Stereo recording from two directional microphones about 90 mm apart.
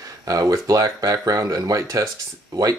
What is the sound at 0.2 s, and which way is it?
Speech, 40° right (ahead or behind).